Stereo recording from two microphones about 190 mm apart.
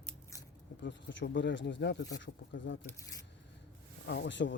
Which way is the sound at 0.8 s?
75° left (ahead or behind).